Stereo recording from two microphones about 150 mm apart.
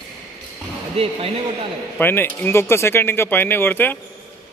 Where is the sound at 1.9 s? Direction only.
15° left (ahead or behind).